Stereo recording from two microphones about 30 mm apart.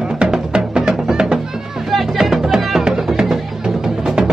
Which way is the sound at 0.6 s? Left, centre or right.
Right.